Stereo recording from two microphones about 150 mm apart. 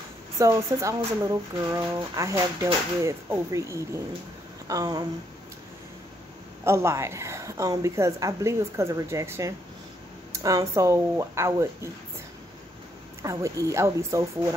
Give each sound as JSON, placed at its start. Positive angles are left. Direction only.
{"t": 0.4, "sound": "speech", "side_deg": -20}
{"t": 6.6, "sound": "speech", "side_deg": -20}
{"t": 13.2, "sound": "speech", "side_deg": -20}